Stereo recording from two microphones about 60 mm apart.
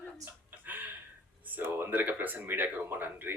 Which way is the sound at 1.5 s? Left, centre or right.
Right.